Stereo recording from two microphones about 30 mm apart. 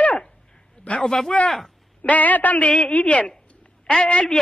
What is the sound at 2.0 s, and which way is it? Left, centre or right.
Speech, left.